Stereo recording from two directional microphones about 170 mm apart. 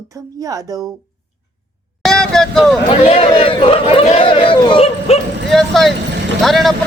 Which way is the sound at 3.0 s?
35° left (ahead or behind).